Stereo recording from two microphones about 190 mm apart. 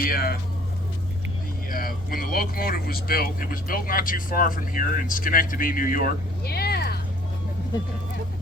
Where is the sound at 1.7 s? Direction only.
50° left (ahead or behind).